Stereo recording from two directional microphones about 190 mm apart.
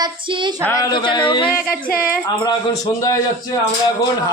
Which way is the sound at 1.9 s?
50° left (ahead or behind).